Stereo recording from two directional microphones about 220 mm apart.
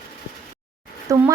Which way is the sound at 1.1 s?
15° right (ahead or behind).